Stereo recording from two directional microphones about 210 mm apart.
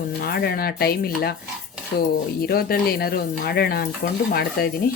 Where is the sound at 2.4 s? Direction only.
45° left (ahead or behind).